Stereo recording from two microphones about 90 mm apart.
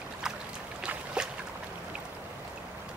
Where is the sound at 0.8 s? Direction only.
10° right (ahead or behind).